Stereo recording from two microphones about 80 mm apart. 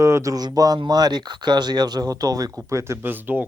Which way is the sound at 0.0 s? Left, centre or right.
Right.